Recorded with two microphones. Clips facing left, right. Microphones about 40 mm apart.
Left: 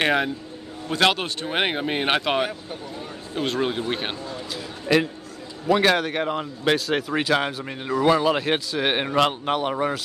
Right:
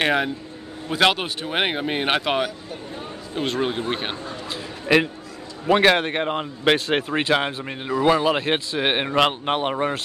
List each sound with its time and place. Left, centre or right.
0.0 s speech: centre
4.3 s a man's voice: right
8.1 s speech: centre